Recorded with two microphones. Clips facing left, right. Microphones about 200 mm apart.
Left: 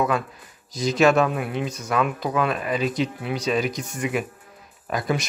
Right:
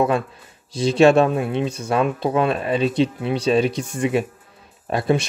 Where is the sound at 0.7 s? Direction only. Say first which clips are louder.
Right 4 dB; 30° right (ahead or behind).